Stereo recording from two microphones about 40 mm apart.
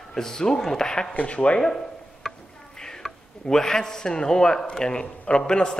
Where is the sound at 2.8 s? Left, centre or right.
Centre.